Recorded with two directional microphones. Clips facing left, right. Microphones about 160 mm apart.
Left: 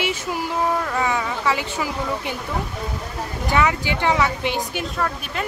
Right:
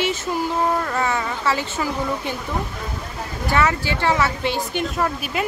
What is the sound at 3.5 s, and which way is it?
Speech, 15° left (ahead or behind).